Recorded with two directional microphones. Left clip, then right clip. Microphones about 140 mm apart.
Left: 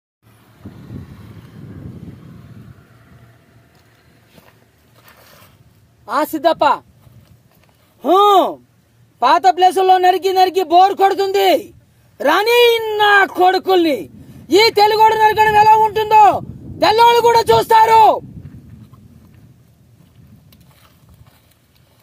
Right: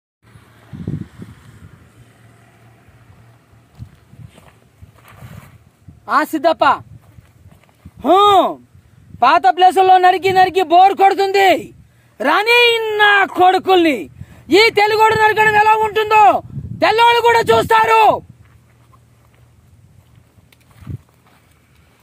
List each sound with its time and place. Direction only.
0.7 s vehicle: 10° right (ahead or behind)
5.0 s a sound: 50° left (ahead or behind)
6.0 s speech: 25° right (ahead or behind)
8.0 s speech: 30° right (ahead or behind)